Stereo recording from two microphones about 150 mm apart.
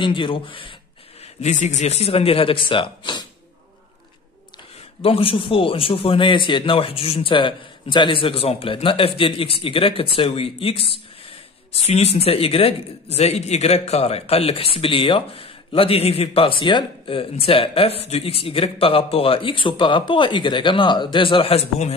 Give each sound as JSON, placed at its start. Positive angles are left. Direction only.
{"t": 0.0, "sound": "speech", "side_deg": 35}
{"t": 1.2, "sound": "a man's voice", "side_deg": 50}
{"t": 5.0, "sound": "speech", "side_deg": 40}